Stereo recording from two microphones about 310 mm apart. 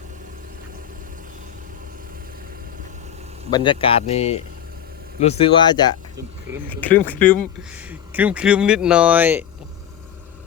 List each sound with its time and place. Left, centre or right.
3.5 s speech: centre